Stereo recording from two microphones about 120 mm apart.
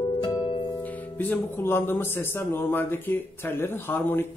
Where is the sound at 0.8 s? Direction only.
15° left (ahead or behind).